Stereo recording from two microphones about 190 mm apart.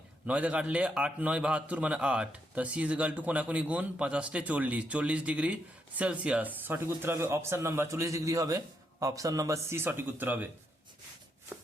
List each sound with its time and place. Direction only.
0.3 s a man's voice: 5° right (ahead or behind)